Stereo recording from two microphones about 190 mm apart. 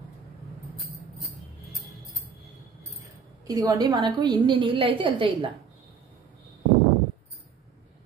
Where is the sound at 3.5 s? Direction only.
20° right (ahead or behind).